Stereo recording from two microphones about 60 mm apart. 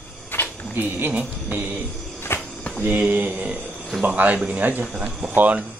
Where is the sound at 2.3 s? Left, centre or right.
Left.